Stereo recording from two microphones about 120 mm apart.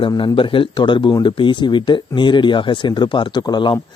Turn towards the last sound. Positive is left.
turn(degrees=40)  # may be behind; listen again after turning